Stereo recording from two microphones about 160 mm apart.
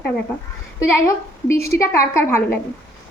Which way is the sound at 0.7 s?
20° left (ahead or behind).